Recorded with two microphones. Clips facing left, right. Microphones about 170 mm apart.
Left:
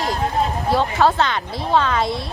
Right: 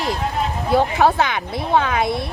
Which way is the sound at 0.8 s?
15° right (ahead or behind).